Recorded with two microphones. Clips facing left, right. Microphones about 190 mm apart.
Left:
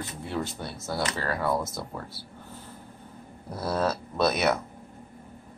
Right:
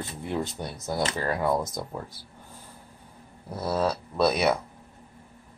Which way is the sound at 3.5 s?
10° right (ahead or behind).